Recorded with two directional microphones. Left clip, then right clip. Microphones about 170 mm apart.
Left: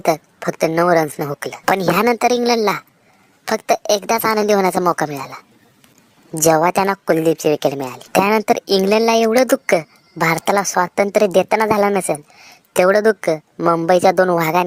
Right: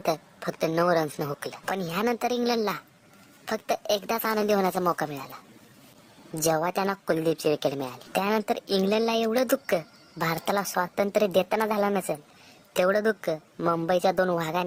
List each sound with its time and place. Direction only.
0.0 s a woman's voice: 30° left (ahead or behind)